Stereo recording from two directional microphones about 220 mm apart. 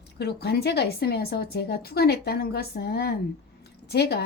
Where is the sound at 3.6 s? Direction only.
50° left (ahead or behind).